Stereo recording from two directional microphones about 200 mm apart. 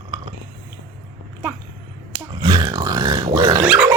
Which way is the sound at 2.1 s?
20° right (ahead or behind).